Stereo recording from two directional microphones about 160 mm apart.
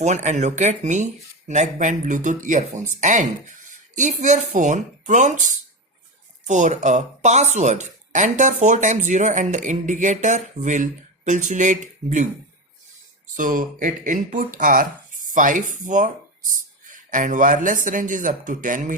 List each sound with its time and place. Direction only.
0.0 s speech: 45° right (ahead or behind)
13.3 s speech: 55° right (ahead or behind)